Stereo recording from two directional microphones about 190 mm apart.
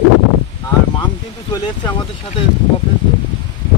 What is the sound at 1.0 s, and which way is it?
Speech, 25° left (ahead or behind).